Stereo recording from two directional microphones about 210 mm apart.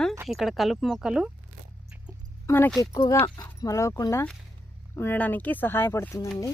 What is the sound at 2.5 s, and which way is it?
Speech, 10° left (ahead or behind).